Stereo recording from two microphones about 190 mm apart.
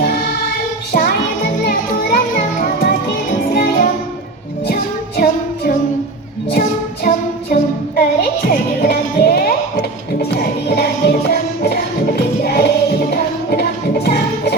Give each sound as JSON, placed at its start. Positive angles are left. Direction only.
{"t": 0.9, "sound": "music", "side_deg": 50}